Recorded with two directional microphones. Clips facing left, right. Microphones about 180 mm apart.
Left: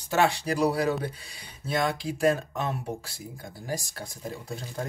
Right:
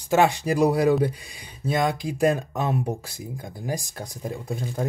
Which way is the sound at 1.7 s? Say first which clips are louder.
Right 3 dB; 15° right (ahead or behind).